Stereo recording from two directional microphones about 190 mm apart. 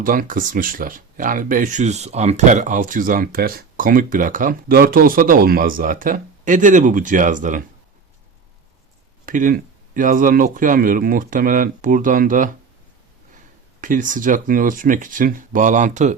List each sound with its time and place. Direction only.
0.0 s speech: 45° right (ahead or behind)
9.2 s speech: 45° right (ahead or behind)
13.8 s speech: 45° right (ahead or behind)